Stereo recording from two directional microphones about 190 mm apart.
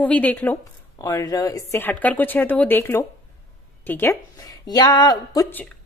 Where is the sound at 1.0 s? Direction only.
20° left (ahead or behind).